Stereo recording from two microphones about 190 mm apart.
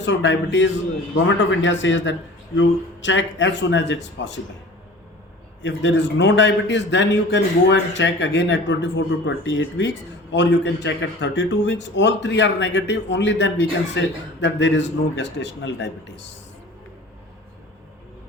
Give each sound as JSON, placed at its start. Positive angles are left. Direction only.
{"t": 0.0, "sound": "a man's voice", "side_deg": 70}
{"t": 5.6, "sound": "a man's voice", "side_deg": 70}